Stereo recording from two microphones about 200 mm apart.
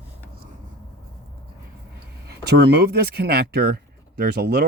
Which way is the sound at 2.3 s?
55° right (ahead or behind).